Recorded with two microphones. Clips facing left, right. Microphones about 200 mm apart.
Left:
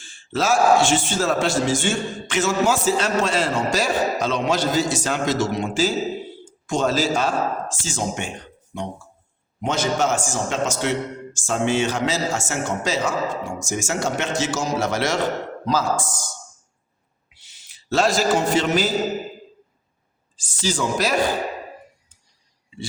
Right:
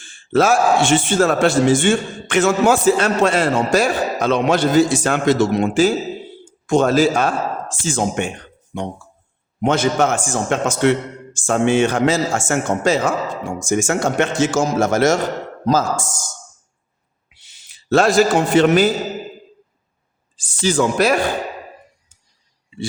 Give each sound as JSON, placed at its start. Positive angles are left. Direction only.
{"t": 0.0, "sound": "a man's voice", "side_deg": -55}
{"t": 9.6, "sound": "a man's voice", "side_deg": -55}
{"t": 17.5, "sound": "a man's voice", "side_deg": -55}
{"t": 20.3, "sound": "a man's voice", "side_deg": -60}